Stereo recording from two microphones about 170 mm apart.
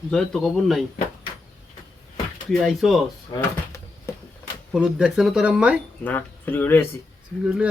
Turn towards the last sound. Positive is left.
turn(degrees=-5)  # may be behind; listen again after turning